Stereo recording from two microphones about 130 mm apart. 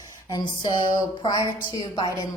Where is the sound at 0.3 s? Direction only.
30° left (ahead or behind).